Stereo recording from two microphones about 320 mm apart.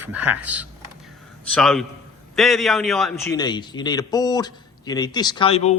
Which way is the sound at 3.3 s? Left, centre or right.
Centre.